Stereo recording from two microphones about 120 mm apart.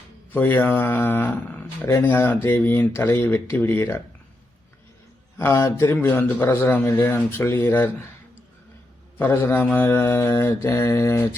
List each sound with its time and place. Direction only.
0.3 s a man's voice: 15° left (ahead or behind)
5.4 s a man's voice: 20° left (ahead or behind)
9.1 s a man's voice: 20° left (ahead or behind)